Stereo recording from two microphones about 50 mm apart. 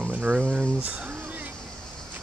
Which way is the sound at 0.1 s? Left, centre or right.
Right.